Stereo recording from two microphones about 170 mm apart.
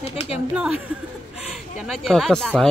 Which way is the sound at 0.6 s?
5° right (ahead or behind).